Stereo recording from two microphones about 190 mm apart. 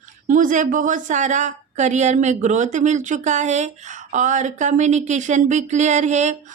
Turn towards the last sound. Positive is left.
turn(degrees=-40)  # may be behind; listen again after turning